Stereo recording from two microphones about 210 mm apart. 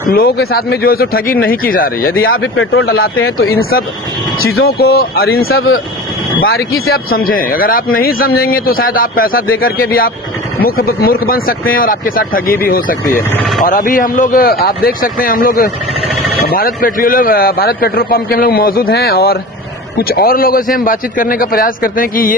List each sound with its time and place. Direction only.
0.0 s speech: 45° left (ahead or behind)
2.4 s speech: 70° left (ahead or behind)
2.8 s speech: 45° left (ahead or behind)
13.3 s speech: centre (ahead or behind)
13.6 s speech: 40° left (ahead or behind)